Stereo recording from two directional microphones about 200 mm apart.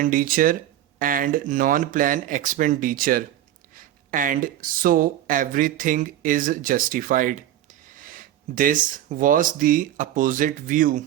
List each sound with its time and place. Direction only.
0.0 s speech: 45° right (ahead or behind)